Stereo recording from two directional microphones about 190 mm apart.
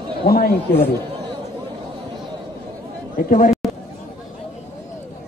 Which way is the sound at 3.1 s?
45° left (ahead or behind).